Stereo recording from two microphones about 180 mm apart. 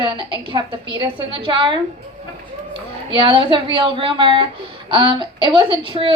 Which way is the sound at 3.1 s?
30° right (ahead or behind).